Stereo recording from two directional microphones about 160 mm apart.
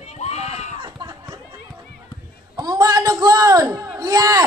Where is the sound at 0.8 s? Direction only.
30° right (ahead or behind).